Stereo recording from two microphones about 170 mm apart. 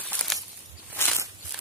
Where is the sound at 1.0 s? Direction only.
15° left (ahead or behind).